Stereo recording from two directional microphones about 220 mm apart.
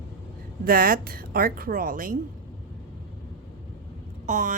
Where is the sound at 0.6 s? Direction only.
40° right (ahead or behind).